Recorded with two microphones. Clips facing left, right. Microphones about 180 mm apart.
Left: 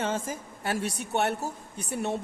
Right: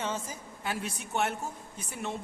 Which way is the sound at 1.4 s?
70° left (ahead or behind).